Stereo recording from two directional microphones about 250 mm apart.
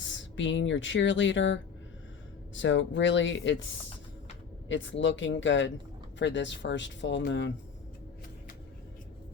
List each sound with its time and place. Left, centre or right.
0.1 s speech: left
2.6 s speech: left
4.7 s speech: left